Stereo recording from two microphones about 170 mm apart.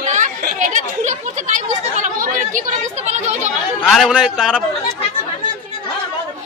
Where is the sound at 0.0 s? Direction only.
45° right (ahead or behind).